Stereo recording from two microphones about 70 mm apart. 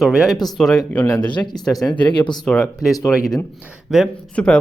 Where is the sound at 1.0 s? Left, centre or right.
Left.